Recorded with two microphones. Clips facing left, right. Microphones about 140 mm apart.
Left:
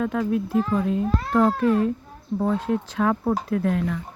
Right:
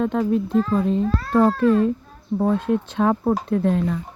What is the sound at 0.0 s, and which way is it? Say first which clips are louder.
Speech: right 3 dB; 25° right (ahead or behind).